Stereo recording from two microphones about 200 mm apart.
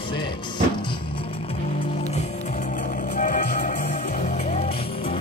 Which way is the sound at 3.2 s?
40° left (ahead or behind).